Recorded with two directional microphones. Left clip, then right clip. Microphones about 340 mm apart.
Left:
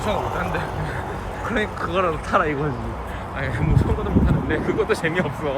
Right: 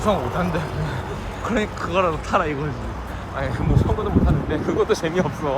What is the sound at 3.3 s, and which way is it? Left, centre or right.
Speech, centre.